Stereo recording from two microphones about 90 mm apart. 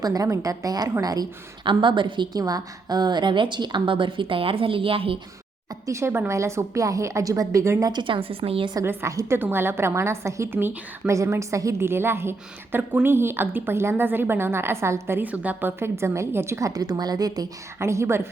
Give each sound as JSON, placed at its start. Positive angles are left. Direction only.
{"t": 0.0, "sound": "a woman's voice", "side_deg": -45}
{"t": 1.6, "sound": "a woman's voice", "side_deg": -65}
{"t": 2.4, "sound": "a woman's voice", "side_deg": -50}
{"t": 5.8, "sound": "a woman's voice", "side_deg": -35}
{"t": 7.9, "sound": "a woman's voice", "side_deg": -70}
{"t": 8.8, "sound": "a woman's voice", "side_deg": -25}
{"t": 15.8, "sound": "a woman's voice", "side_deg": -30}
{"t": 17.7, "sound": "a woman's voice", "side_deg": -30}